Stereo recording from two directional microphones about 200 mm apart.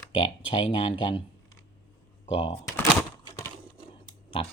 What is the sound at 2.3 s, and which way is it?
Speech, 25° left (ahead or behind).